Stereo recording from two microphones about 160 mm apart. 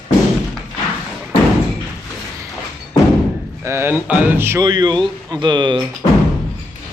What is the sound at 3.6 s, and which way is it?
Speech, 15° right (ahead or behind).